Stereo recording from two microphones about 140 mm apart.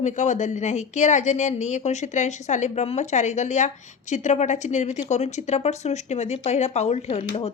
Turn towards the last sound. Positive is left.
turn(degrees=50)  # may be behind; listen again after turning